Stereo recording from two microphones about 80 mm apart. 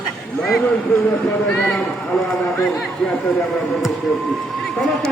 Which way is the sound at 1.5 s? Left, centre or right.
Left.